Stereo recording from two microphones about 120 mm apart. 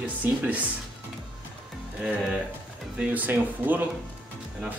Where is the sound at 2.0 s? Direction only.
5° right (ahead or behind).